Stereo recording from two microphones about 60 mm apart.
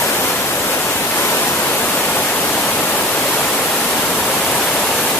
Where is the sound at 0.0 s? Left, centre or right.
Left.